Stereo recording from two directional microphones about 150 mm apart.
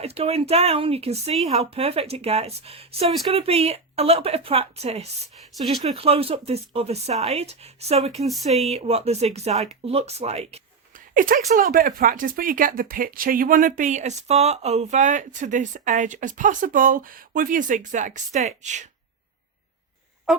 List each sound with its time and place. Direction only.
0.0 s speech: 40° right (ahead or behind)
5.5 s speech: centre (ahead or behind)
6.0 s speech: 40° right (ahead or behind)
10.9 s speech: 65° right (ahead or behind)
20.3 s a sound: 5° right (ahead or behind)